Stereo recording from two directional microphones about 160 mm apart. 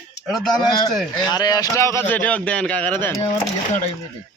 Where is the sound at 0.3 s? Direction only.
Centre (ahead or behind).